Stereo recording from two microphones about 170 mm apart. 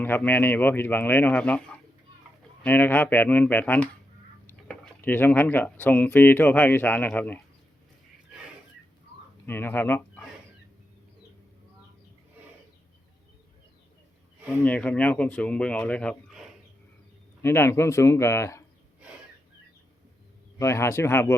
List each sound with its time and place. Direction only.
0.0 s speech: 10° left (ahead or behind)
9.5 s speech: 10° left (ahead or behind)
14.6 s speech: 10° left (ahead or behind)
17.4 s speech: 15° left (ahead or behind)
20.6 s speech: 15° left (ahead or behind)